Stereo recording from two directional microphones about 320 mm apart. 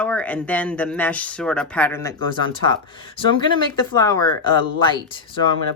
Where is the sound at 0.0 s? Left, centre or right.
Centre.